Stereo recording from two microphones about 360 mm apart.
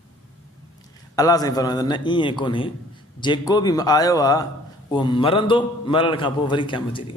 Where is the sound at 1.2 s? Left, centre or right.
Centre.